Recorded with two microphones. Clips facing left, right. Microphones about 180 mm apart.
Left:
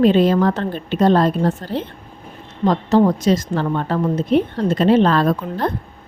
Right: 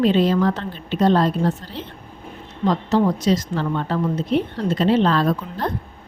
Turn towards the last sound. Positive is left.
turn(degrees=55)  # may be behind; listen again after turning